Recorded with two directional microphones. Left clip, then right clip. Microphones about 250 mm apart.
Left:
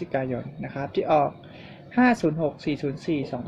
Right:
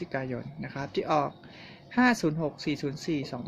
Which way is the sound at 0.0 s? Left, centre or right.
Centre.